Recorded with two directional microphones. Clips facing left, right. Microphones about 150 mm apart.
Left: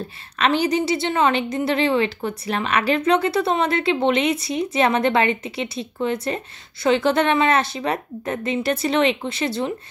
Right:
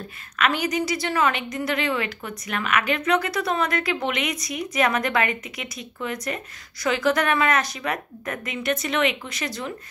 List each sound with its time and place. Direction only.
0.4 s a woman's voice: 30° left (ahead or behind)